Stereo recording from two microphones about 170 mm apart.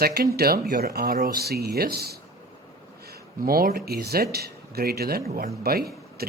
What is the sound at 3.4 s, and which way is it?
Speech, 60° right (ahead or behind).